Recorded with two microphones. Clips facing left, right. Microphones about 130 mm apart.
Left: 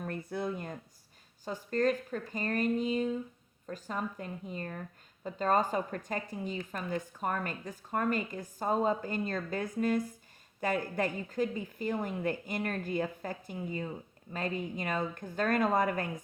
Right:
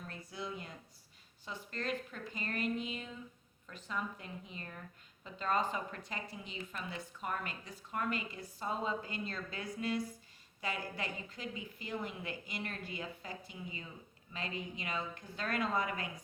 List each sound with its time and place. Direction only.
0.0 s a woman's voice: 55° left (ahead or behind)